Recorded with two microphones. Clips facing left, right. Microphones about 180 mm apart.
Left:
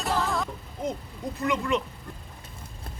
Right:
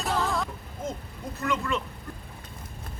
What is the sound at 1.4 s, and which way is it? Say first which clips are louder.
Speech: left 2 dB; 15° left (ahead or behind).